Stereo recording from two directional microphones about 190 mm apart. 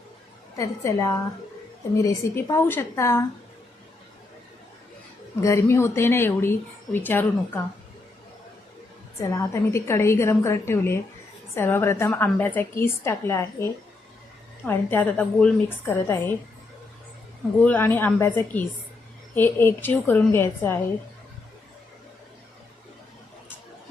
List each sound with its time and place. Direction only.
0.5 s speech: 15° left (ahead or behind)
5.4 s speech: 15° left (ahead or behind)
9.2 s speech: 15° left (ahead or behind)
17.6 s speech: 10° left (ahead or behind)